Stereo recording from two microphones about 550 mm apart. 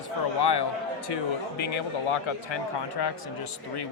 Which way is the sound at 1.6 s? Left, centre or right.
Left.